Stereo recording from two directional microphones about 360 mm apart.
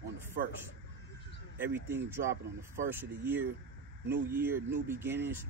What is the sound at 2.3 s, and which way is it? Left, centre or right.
Speech, right.